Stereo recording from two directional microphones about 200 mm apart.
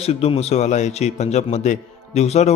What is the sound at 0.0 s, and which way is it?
A man's voice, 30° left (ahead or behind).